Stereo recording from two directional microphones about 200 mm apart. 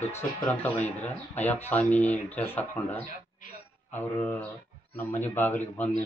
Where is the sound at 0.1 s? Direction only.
10° left (ahead or behind).